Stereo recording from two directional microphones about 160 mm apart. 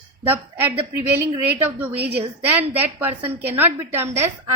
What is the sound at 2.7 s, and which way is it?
A woman's voice, 10° right (ahead or behind).